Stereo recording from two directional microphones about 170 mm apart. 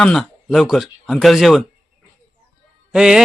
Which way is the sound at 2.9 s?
5° right (ahead or behind).